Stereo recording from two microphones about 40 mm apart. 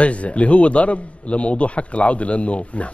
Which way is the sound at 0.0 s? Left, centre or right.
Left.